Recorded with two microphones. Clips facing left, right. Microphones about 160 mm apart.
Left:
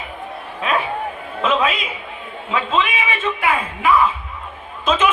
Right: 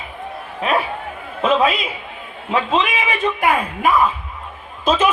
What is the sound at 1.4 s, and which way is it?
A man's voice, 35° right (ahead or behind).